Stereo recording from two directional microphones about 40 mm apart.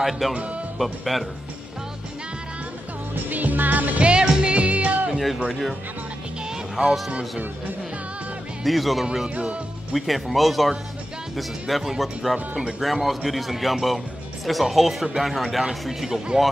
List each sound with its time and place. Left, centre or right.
0.2 s speech: centre
3.3 s music: right
4.0 s music: right
5.1 s music: centre
5.5 s speech: centre
6.8 s speech: right
8.6 s speech: centre
9.0 s speech: centre
9.3 s music: right
9.9 s speech: centre